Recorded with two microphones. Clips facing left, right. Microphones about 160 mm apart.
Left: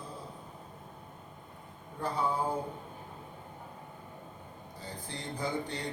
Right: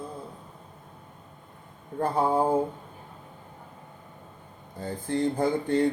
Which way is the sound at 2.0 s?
50° right (ahead or behind).